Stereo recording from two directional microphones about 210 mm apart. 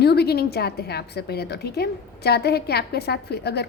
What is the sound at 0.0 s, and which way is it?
A woman's voice, 50° left (ahead or behind).